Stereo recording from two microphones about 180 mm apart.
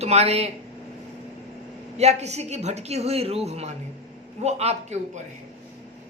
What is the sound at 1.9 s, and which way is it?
A woman's voice, 35° right (ahead or behind).